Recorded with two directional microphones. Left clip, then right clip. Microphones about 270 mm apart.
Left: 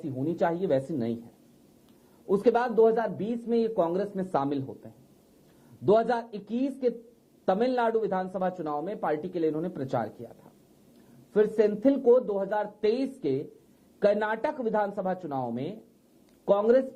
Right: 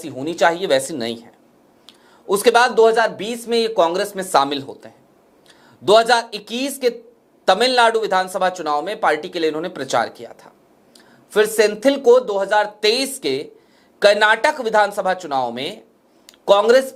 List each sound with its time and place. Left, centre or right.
0.3 s speech: centre
2.4 s speech: centre
4.6 s a man's voice: right
6.0 s speech: centre
16.6 s speech: centre